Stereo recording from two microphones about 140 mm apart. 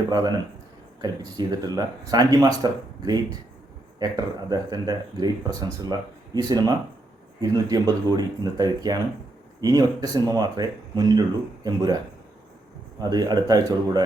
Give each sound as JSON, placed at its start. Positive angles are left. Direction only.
{"t": 0.1, "sound": "speech", "side_deg": -30}
{"t": 13.0, "sound": "speech", "side_deg": -30}